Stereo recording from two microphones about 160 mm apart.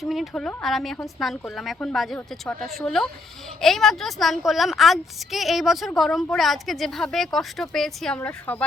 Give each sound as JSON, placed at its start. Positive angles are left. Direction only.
{"t": 0.0, "sound": "a woman's voice", "side_deg": 0}